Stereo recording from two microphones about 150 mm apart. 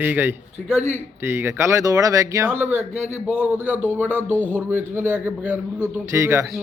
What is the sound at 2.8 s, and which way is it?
Speech, 50° right (ahead or behind).